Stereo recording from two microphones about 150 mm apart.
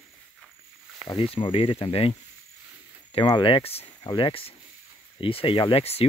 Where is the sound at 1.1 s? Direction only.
35° left (ahead or behind).